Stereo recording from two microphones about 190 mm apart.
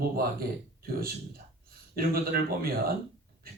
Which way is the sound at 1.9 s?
50° right (ahead or behind).